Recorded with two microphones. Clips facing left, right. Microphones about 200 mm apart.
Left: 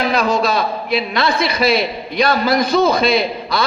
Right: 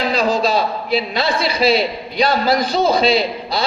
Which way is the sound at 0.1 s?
60° left (ahead or behind).